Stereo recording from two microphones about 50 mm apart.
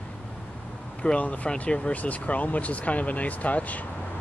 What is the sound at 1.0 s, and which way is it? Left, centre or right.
Speech, left.